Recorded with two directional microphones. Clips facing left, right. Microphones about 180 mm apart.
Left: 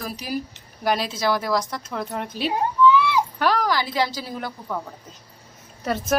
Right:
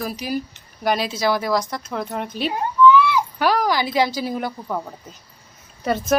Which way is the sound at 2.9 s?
35° left (ahead or behind).